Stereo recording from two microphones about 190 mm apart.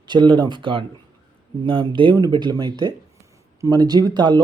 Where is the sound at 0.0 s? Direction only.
25° right (ahead or behind).